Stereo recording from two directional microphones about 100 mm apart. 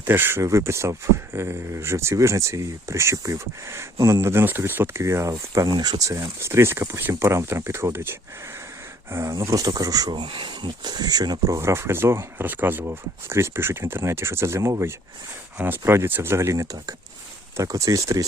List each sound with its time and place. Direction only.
0.0 s speech: 20° right (ahead or behind); by 6.0 s 45° right (ahead or behind)
6.0 s speech: 30° right (ahead or behind)
10.2 s speech: 60° right (ahead or behind); by 18.3 s 35° right (ahead or behind)